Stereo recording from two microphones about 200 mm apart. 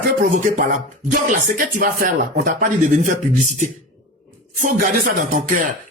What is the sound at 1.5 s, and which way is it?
Speech, 40° right (ahead or behind).